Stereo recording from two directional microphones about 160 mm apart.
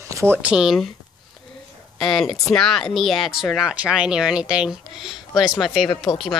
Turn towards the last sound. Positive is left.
turn(degrees=0)  # may be behind; listen again after turning